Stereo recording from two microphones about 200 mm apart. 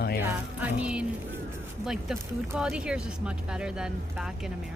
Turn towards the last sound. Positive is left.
turn(degrees=-5)  # may be behind; listen again after turning